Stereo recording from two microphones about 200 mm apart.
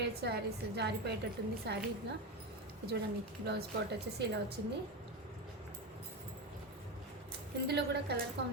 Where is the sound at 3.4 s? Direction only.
55° right (ahead or behind).